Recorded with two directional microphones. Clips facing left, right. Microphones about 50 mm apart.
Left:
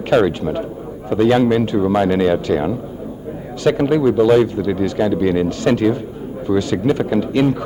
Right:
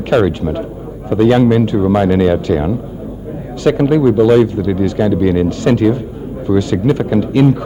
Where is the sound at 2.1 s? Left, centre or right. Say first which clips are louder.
Right 3 dB; centre.